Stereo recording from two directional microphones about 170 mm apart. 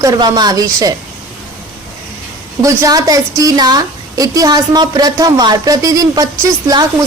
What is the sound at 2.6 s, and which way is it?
Speech, 20° right (ahead or behind).